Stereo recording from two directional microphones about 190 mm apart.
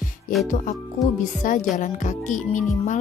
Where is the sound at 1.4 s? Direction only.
40° left (ahead or behind).